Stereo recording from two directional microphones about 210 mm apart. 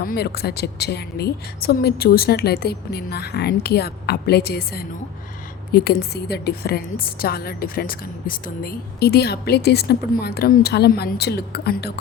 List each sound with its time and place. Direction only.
0.0 s a woman's voice: 45° left (ahead or behind)